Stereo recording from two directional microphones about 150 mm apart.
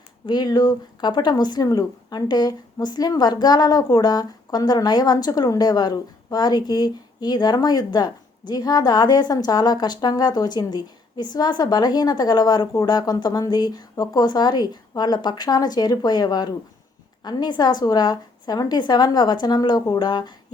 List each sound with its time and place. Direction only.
0.3 s speech: 30° left (ahead or behind)